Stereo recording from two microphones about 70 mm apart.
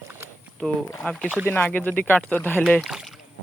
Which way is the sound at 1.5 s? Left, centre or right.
Left.